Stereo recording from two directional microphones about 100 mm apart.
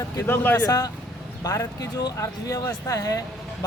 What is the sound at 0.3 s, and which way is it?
Speech, 20° left (ahead or behind).